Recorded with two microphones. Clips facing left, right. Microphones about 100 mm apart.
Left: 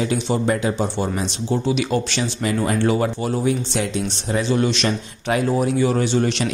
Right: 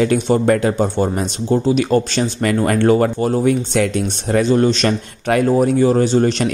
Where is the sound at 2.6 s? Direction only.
55° right (ahead or behind).